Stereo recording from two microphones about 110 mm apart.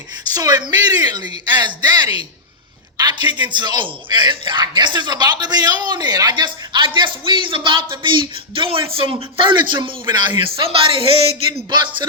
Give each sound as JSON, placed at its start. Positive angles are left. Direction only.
{"t": 0.3, "sound": "a man's voice", "side_deg": -35}
{"t": 11.7, "sound": "a man's voice", "side_deg": -45}